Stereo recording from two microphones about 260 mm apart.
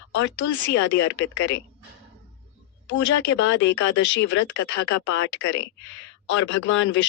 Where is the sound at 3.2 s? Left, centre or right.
Left.